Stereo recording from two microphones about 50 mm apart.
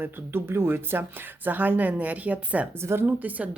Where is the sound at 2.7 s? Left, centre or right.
Right.